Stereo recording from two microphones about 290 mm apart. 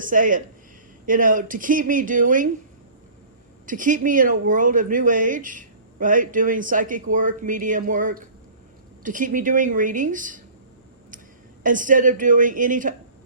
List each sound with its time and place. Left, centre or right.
0.0 s speech: right
3.7 s speech: right
11.6 s speech: right